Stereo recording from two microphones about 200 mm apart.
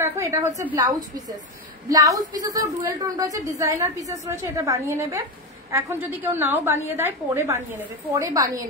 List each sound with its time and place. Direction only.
0.0 s a woman's voice: 15° right (ahead or behind)